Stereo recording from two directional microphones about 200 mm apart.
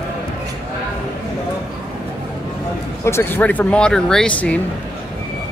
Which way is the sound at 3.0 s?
10° left (ahead or behind).